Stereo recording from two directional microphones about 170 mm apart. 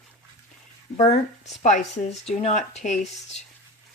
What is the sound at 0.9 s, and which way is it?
Speech, 45° left (ahead or behind).